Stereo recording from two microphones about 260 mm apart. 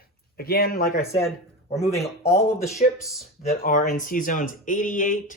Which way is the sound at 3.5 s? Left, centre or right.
Left.